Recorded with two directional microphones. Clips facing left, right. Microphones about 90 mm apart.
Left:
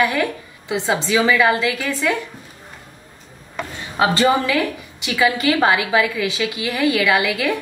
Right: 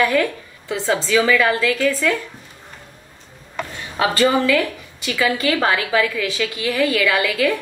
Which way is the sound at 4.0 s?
25° left (ahead or behind).